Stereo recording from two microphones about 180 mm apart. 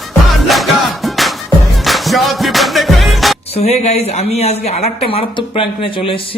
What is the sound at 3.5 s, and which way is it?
Speech, 35° left (ahead or behind).